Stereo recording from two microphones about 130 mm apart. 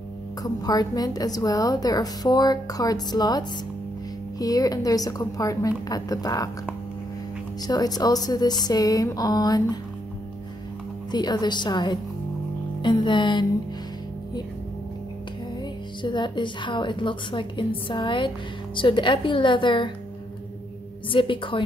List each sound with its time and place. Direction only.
0.4 s a woman's voice: 30° left (ahead or behind)
7.6 s a woman's voice: 30° left (ahead or behind)
11.1 s a woman's voice: 35° left (ahead or behind)
16.0 s a woman's voice: 35° left (ahead or behind)
21.1 s a woman's voice: 40° left (ahead or behind)